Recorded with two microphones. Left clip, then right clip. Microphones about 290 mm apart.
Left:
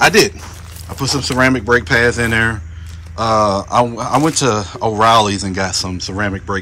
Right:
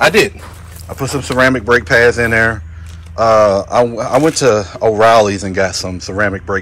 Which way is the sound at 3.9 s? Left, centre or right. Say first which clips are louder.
Right 3 dB; centre.